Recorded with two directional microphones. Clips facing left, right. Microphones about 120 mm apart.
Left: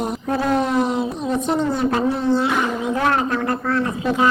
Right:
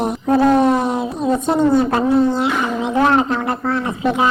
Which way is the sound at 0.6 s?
55° right (ahead or behind).